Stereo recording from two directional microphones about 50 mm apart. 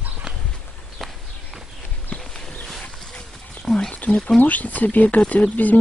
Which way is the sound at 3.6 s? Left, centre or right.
Centre.